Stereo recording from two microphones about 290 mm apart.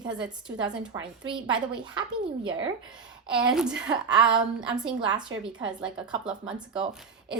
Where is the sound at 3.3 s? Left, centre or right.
Centre.